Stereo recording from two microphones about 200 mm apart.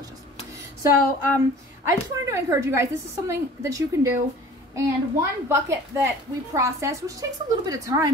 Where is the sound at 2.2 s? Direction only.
15° right (ahead or behind).